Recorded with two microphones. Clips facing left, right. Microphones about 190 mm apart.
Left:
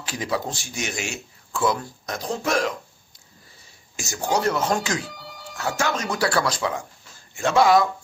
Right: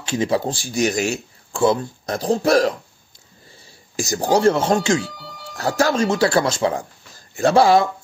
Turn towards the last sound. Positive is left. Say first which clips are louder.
# right 3 dB
turn(degrees=-30)  # may be behind; listen again after turning